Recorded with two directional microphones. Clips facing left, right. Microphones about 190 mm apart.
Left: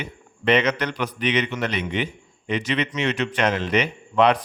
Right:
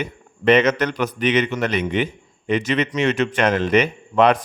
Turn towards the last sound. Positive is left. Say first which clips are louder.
# right 2 dB
turn(degrees=-50)  # may be behind; listen again after turning